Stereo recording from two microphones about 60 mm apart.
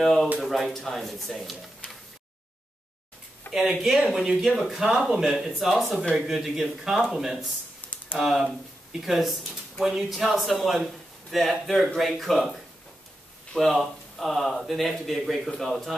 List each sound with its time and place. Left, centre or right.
0.0 s speech: centre
3.5 s speech: centre
7.8 s typing: left
8.2 s speech: centre